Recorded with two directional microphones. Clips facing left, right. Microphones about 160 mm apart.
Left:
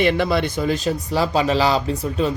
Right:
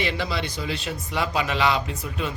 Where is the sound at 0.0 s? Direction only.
55° left (ahead or behind).